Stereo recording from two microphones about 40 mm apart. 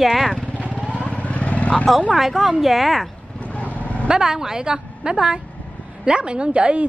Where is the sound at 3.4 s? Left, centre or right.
Left.